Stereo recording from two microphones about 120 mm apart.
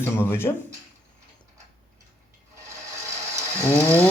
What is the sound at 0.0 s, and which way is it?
Speech, 20° left (ahead or behind).